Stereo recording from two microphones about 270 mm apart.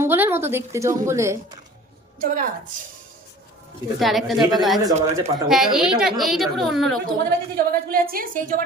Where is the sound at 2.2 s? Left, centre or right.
Right.